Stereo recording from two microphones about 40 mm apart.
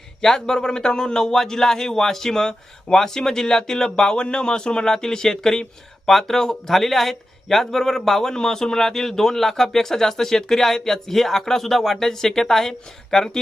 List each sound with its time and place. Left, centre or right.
0.2 s speech: centre